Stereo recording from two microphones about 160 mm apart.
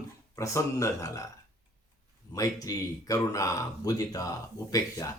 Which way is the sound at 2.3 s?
20° left (ahead or behind).